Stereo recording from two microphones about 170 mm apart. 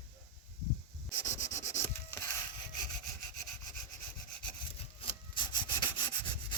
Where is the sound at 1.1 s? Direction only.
20° left (ahead or behind).